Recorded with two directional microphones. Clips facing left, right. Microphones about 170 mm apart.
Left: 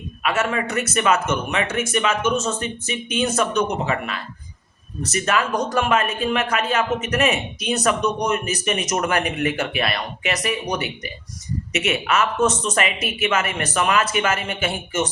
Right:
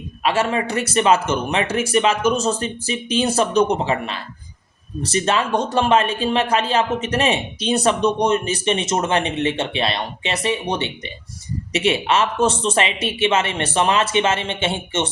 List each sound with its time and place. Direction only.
0.2 s speech: 30° right (ahead or behind)